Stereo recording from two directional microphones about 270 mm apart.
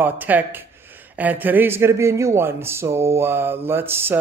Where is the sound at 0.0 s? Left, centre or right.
Centre.